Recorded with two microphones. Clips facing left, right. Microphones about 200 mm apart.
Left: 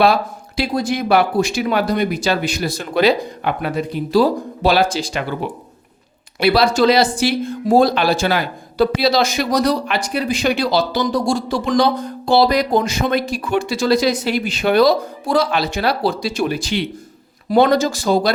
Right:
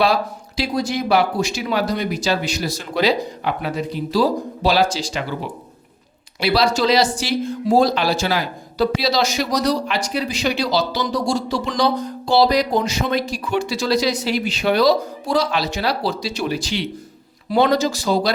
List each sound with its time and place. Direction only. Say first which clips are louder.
0.0 s speech: left 3 dB; 55° left (ahead or behind)
6.4 s speech: left 4 dB; 55° left (ahead or behind)